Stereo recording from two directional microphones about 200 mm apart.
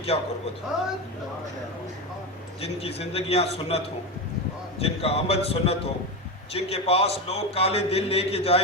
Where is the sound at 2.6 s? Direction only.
30° left (ahead or behind).